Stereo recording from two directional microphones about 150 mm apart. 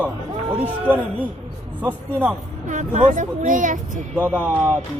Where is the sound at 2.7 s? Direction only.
55° right (ahead or behind).